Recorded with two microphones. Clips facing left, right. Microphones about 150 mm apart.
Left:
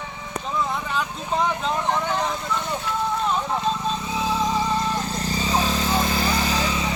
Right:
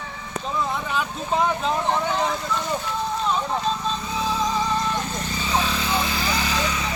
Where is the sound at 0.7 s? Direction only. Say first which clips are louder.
Even; 5° right (ahead or behind).